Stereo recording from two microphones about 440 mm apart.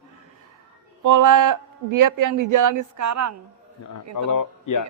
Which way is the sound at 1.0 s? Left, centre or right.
Right.